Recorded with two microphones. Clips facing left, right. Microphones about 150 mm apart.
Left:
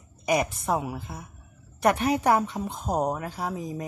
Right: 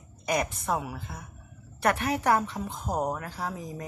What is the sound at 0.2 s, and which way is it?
A woman's voice, 10° left (ahead or behind).